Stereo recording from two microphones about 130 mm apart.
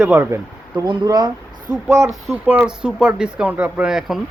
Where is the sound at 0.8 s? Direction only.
35° right (ahead or behind).